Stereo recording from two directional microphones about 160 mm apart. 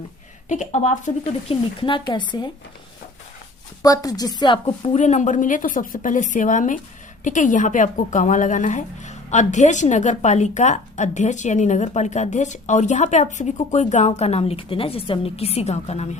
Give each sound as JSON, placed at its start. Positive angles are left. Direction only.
{"t": 0.4, "sound": "speech", "side_deg": 50}
{"t": 3.8, "sound": "a woman's voice", "side_deg": 20}
{"t": 4.9, "sound": "speech", "side_deg": 50}